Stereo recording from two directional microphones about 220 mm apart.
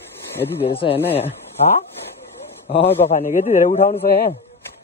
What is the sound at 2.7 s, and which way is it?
A man's voice, 25° left (ahead or behind).